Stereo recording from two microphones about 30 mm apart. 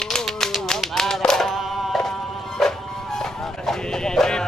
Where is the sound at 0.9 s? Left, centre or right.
Centre.